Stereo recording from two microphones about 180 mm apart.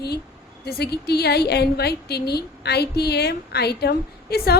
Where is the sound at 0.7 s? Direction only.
60° left (ahead or behind).